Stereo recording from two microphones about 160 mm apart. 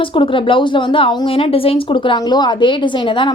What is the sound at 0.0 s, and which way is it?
Speech, 30° left (ahead or behind).